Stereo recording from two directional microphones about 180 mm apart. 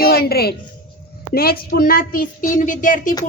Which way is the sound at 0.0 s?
60° left (ahead or behind).